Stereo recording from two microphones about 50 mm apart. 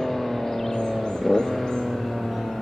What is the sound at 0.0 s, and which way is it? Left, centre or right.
Vehicle, centre.